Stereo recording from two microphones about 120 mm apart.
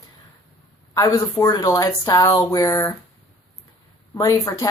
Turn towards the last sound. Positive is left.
turn(degrees=25)  # may be behind; listen again after turning